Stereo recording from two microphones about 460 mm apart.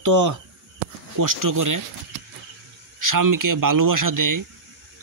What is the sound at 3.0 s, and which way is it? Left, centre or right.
Speech, right.